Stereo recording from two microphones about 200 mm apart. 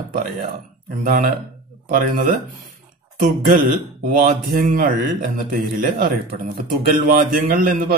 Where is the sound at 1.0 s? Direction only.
40° right (ahead or behind).